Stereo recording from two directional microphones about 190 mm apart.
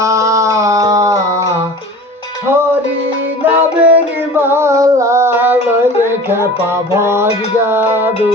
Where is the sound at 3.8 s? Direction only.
10° right (ahead or behind).